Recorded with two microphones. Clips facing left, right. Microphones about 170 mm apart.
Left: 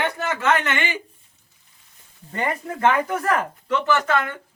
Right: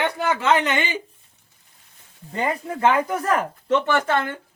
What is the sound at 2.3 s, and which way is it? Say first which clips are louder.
Speech: right 1 dB; 10° right (ahead or behind).